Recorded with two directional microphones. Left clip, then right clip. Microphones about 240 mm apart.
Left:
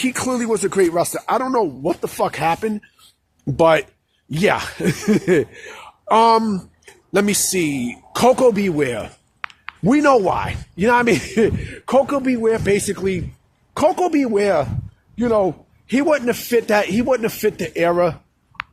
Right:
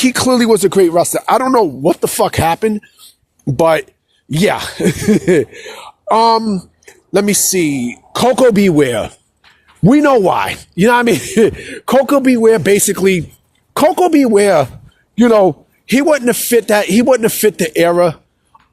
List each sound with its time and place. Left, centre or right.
0.0 s a man's voice: right
3.1 s a sound: right
4.3 s speech: right
8.4 s a man's voice: right
13.7 s a man's voice: right
18.5 s clicking: right